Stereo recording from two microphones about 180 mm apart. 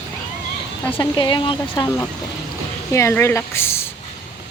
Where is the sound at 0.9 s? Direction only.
25° left (ahead or behind).